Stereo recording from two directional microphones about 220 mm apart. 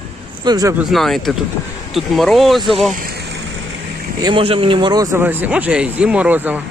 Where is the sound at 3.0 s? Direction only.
45° right (ahead or behind).